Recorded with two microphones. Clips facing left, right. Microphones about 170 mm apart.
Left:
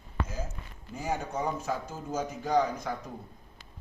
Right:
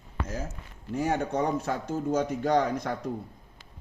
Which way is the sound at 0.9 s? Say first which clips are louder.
Right 6 dB; 85° right.